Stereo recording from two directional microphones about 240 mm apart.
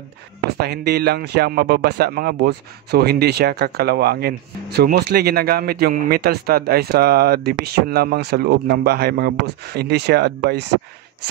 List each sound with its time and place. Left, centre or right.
0.6 s speech: right